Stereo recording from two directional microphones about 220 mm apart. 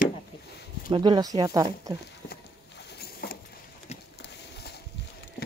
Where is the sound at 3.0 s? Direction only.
45° left (ahead or behind).